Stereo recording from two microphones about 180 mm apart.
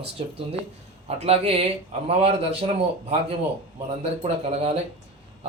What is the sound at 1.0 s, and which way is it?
Speech, 35° right (ahead or behind).